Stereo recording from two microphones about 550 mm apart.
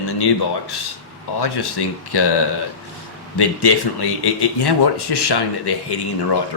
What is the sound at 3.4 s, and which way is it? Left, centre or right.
A man's voice, left.